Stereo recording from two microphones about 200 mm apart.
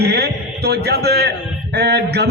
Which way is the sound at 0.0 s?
55° right (ahead or behind).